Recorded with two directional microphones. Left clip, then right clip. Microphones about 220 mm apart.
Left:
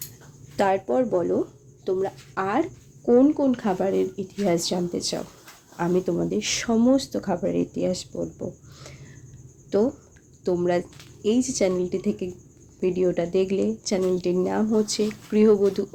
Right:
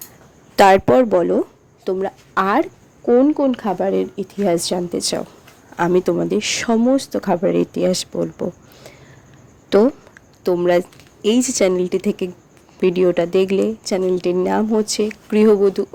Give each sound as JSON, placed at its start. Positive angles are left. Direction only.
{"t": 0.5, "sound": "speech", "side_deg": -45}
{"t": 9.6, "sound": "speech", "side_deg": -45}